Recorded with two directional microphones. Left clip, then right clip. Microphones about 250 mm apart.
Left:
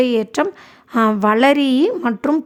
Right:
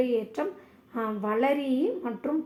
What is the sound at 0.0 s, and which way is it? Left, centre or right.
A woman's voice, left.